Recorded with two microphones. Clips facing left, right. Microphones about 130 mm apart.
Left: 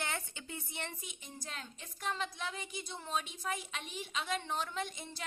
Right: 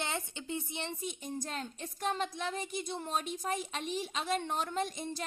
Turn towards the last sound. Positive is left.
turn(degrees=-40)  # may be behind; listen again after turning